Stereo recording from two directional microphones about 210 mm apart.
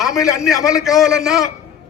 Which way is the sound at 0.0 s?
Centre (ahead or behind).